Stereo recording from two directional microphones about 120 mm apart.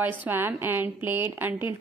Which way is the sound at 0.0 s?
15° right (ahead or behind).